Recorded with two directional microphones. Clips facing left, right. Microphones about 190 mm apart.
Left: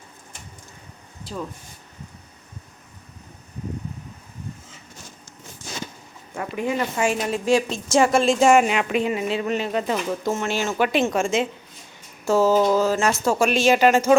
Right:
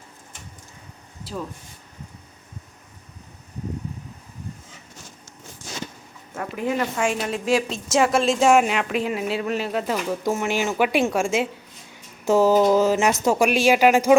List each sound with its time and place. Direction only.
1.2 s speech: 5° right (ahead or behind)
6.3 s a woman's voice: centre (ahead or behind)